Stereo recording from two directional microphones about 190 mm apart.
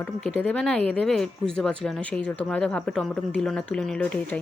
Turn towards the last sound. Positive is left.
turn(degrees=5)  # may be behind; listen again after turning